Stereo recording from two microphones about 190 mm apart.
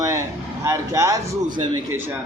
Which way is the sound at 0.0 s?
15° right (ahead or behind).